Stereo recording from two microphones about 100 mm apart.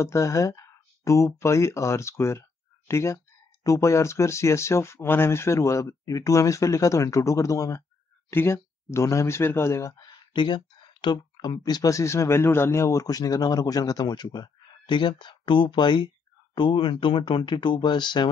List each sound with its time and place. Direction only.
0.0 s speech: 30° left (ahead or behind)
9.9 s a sound: 55° left (ahead or behind)
11.6 s speech: 40° left (ahead or behind)